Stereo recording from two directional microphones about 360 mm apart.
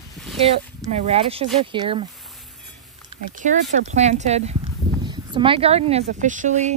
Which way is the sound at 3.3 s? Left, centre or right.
Centre.